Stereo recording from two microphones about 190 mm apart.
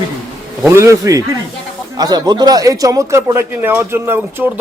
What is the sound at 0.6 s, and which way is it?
Speech, 15° right (ahead or behind).